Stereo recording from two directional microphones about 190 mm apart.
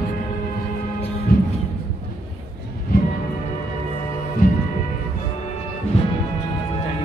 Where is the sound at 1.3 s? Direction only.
50° left (ahead or behind).